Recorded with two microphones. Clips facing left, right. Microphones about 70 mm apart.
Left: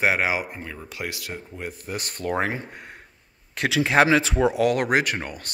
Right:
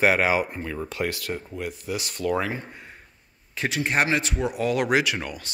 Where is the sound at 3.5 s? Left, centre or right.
Left.